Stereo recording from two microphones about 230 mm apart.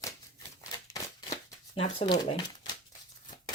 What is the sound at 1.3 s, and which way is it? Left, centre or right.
Shuffling cards, left.